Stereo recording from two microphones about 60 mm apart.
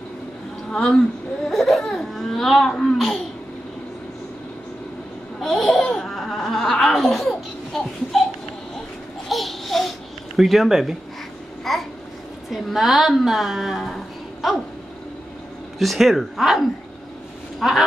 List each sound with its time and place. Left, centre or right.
0.7 s speech: centre
1.5 s speech: centre
5.4 s laughter: centre
9.3 s babbling: centre
12.4 s a woman's voice: centre
15.8 s a woman's voice: centre